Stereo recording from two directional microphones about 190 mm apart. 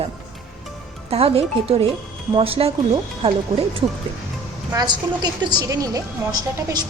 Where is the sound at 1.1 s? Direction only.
30° right (ahead or behind).